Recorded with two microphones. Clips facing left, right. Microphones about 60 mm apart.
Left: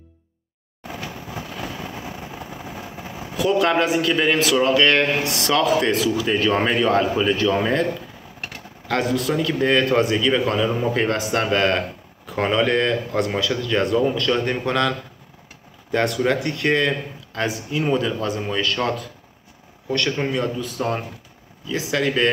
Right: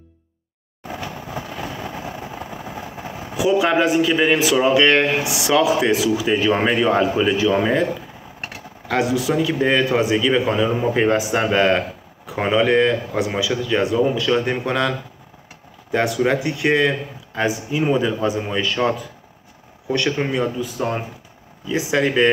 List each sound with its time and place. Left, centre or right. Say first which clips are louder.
0.9 s vehicle: right 3 dB; centre
5.1 s speech: right 2 dB; centre
21.6 s speech: right 3 dB; centre